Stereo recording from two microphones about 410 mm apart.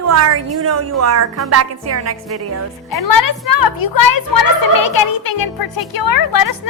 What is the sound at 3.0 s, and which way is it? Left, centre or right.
A child's voice, left.